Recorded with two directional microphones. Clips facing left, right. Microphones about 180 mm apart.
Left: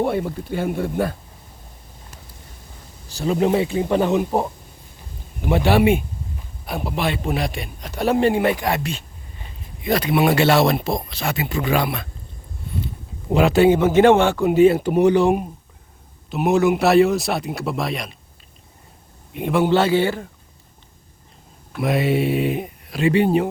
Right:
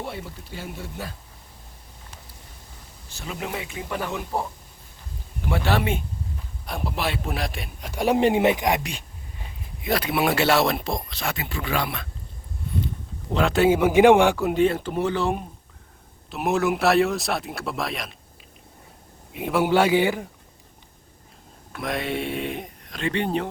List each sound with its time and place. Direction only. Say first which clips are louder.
0.0 s speech: left 13 dB; 55° left (ahead or behind)
3.1 s a man's voice: left 14 dB; 35° left (ahead or behind); by 9.0 s 15° right (ahead or behind)
9.8 s speech: left 5 dB; centre (ahead or behind)
11.4 s speech: left 8 dB; 20° left (ahead or behind)
13.3 s a man's voice: left 5 dB; 5° left (ahead or behind); by 14.4 s 15° right (ahead or behind)
14.4 s speech: left 7 dB; 5° left (ahead or behind)
16.3 s speech: left 6 dB; centre (ahead or behind)
19.3 s a man's voice: left 3 dB; 5° right (ahead or behind)
21.8 s speech: left 8 dB; 5° left (ahead or behind)